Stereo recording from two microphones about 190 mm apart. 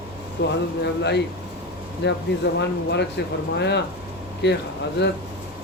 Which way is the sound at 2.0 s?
65° left (ahead or behind).